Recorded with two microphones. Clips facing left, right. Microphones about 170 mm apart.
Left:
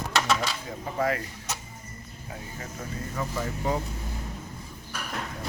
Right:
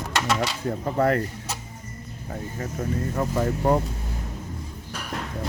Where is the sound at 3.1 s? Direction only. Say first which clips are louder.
Right 5 dB; 50° right (ahead or behind).